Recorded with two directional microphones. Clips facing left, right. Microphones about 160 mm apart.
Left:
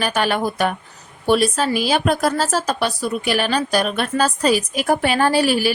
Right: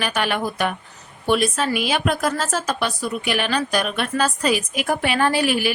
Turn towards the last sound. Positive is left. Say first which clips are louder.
# left 3 dB
turn(degrees=35)  # may be behind; listen again after turning